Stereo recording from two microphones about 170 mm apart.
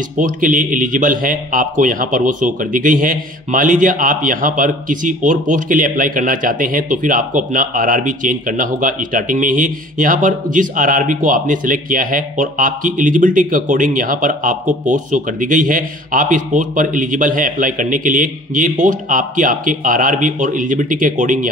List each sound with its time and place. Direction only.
0.2 s a man's voice: 50° right (ahead or behind)